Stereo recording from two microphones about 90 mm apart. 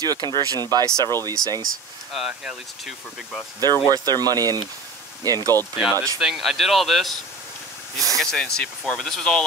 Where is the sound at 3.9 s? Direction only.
45° right (ahead or behind).